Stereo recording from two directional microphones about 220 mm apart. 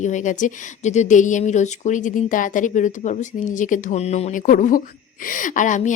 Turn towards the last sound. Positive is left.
turn(degrees=35)  # may be behind; listen again after turning